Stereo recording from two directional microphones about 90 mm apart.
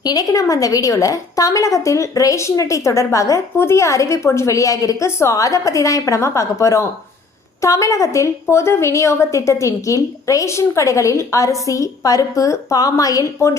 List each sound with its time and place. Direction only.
0.0 s a woman's voice: 45° left (ahead or behind)